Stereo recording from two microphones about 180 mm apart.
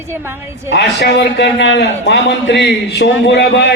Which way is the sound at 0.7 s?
70° left (ahead or behind).